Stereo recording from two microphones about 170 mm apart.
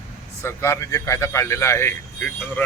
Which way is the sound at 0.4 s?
15° left (ahead or behind).